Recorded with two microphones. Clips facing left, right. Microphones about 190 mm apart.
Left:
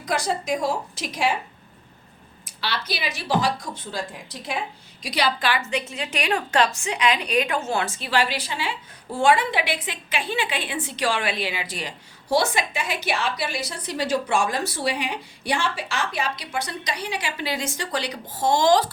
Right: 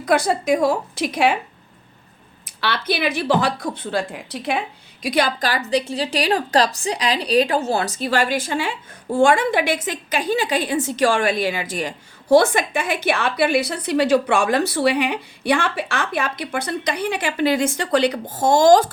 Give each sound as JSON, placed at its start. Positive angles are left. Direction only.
{"t": 0.0, "sound": "a woman's voice", "side_deg": -60}
{"t": 2.6, "sound": "a woman's voice", "side_deg": -55}
{"t": 5.0, "sound": "a woman's voice", "side_deg": -50}